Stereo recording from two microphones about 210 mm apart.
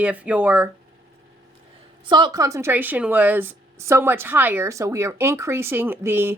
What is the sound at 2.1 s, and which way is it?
A woman's voice, 20° right (ahead or behind).